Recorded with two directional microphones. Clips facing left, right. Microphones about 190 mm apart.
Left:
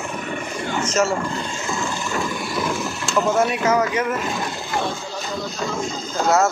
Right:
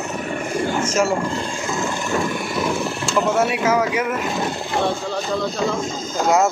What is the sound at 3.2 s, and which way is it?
Speech, 10° right (ahead or behind).